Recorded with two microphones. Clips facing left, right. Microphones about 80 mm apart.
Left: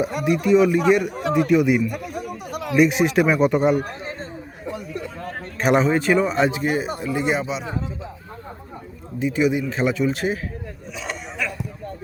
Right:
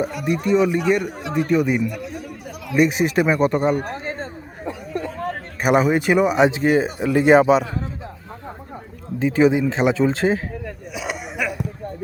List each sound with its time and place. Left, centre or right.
0.3 s speech: centre
1.9 s speech: left
2.5 s a sound: left
2.7 s speech: centre
3.8 s a sound: right
5.5 s a man's voice: centre
6.6 s speech: right
7.0 s speech: right
9.1 s speech: right
10.9 s a sound: centre